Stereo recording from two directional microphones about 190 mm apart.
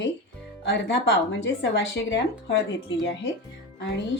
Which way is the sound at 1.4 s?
75° left (ahead or behind).